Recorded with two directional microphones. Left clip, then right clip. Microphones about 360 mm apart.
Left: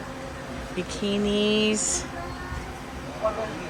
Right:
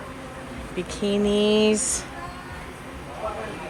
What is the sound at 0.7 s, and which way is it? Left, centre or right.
Speech, centre.